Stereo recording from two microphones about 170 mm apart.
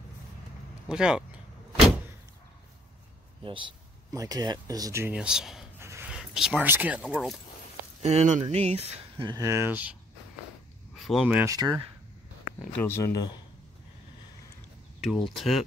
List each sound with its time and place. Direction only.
0.8 s speech: 5° right (ahead or behind)
3.4 s speech: 30° right (ahead or behind); by 5.6 s 5° right (ahead or behind)
5.8 s a sound: 15° right (ahead or behind)
6.1 s speech: 5° right (ahead or behind)
8.0 s speech: 40° right (ahead or behind)
9.3 s speech: 15° right (ahead or behind)
11.1 s speech: 5° right (ahead or behind)
11.5 s speech: 20° right (ahead or behind)
12.7 s speech: 15° left (ahead or behind)
15.0 s speech: centre (ahead or behind)